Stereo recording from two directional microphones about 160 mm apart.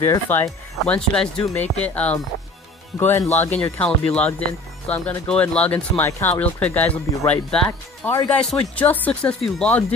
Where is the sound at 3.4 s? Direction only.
10° left (ahead or behind).